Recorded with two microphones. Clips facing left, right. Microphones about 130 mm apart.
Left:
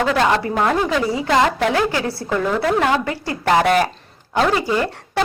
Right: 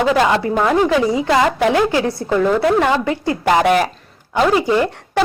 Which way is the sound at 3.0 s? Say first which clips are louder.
Right 5 dB; 15° right (ahead or behind).